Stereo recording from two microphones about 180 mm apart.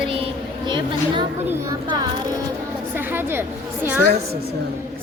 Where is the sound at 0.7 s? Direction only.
25° right (ahead or behind).